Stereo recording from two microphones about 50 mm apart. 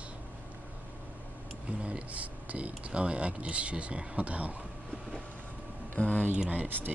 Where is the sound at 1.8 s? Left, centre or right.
Right.